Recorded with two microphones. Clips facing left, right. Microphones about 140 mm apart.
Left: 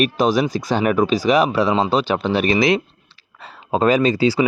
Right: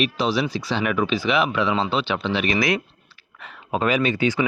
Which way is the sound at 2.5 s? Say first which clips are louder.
Left 6 dB; 25° left (ahead or behind).